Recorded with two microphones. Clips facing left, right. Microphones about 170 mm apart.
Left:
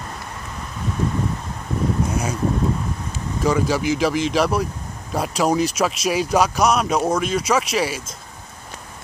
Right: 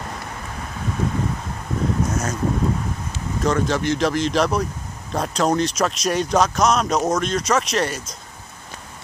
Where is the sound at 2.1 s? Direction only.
10° left (ahead or behind).